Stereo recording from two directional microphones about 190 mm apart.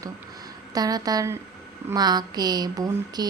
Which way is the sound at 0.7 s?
20° right (ahead or behind).